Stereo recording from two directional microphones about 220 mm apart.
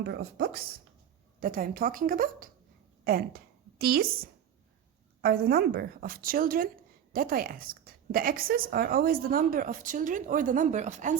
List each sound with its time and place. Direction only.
0.0 s a woman's voice: 45° right (ahead or behind)
5.2 s a woman's voice: 45° right (ahead or behind)